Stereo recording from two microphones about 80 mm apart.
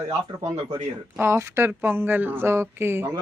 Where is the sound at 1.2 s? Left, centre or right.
Right.